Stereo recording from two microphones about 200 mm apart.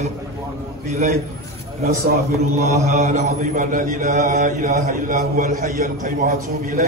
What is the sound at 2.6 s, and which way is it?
Mantra, 35° right (ahead or behind).